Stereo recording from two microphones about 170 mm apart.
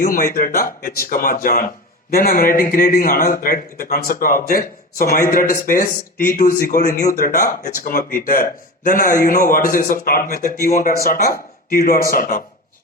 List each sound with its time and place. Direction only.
0.0 s speech: 55° left (ahead or behind)